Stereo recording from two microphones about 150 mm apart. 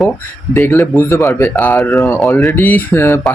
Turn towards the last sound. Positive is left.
turn(degrees=15)  # may be behind; listen again after turning